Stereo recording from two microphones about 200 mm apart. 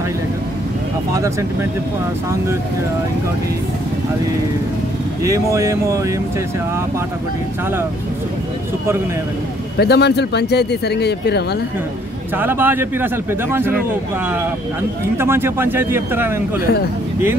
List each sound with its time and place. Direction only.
1.1 s a man's voice: 15° right (ahead or behind)
5.2 s a man's voice: 15° right (ahead or behind)
9.8 s speech: 55° left (ahead or behind)
12.4 s a man's voice: 10° right (ahead or behind)
15.1 s a man's voice: 10° right (ahead or behind)